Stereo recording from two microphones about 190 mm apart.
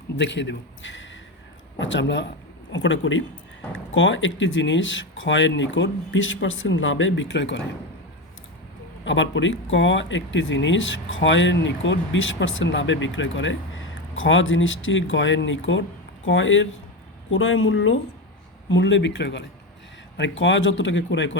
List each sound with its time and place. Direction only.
0.2 s speech: 70° left (ahead or behind)
2.7 s speech: 80° left
9.0 s speech: 75° left (ahead or behind)
18.7 s speech: 75° left (ahead or behind)